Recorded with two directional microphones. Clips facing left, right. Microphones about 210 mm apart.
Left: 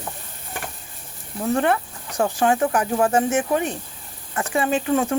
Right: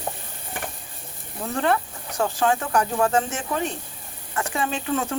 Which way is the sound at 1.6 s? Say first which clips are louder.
Left 1 dB; 20° left (ahead or behind).